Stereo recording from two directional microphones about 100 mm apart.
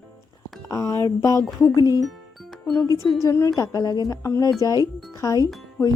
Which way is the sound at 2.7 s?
35° left (ahead or behind).